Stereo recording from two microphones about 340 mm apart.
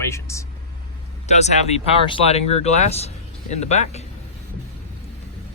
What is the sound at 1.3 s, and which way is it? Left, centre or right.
Speech, centre.